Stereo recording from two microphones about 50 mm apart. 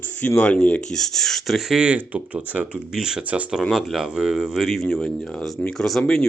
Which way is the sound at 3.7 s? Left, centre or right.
Centre.